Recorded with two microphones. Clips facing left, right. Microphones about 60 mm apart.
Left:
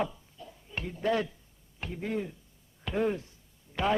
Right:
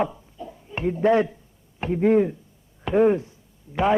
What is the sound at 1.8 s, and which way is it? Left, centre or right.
Speech, right.